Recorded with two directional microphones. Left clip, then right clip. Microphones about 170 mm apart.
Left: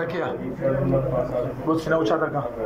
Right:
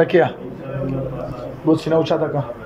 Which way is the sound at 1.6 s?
25° right (ahead or behind).